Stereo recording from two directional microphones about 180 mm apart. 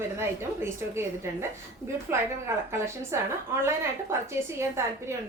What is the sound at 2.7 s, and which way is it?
A woman's voice, 15° right (ahead or behind).